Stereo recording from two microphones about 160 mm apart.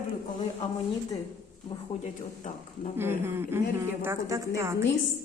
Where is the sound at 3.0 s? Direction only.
15° right (ahead or behind).